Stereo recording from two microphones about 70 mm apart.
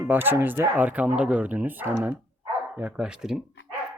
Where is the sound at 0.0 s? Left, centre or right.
Right; by 3.4 s centre.